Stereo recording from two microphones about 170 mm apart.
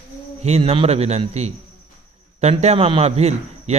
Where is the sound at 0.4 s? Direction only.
35° right (ahead or behind).